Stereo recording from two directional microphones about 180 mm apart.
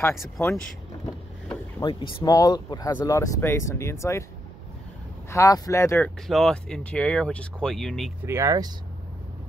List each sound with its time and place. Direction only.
1.8 s speech: 25° left (ahead or behind)
5.3 s speech: 15° left (ahead or behind)
8.3 s speech: 15° right (ahead or behind)